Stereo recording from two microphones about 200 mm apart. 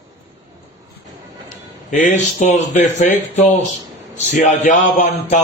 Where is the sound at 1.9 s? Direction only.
40° left (ahead or behind).